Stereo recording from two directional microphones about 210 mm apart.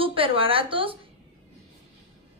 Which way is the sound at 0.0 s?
25° right (ahead or behind).